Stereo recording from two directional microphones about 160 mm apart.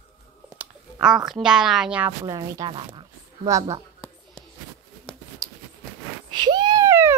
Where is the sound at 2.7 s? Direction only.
35° right (ahead or behind).